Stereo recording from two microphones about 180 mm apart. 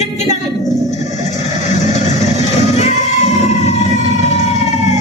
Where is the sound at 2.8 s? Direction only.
40° left (ahead or behind).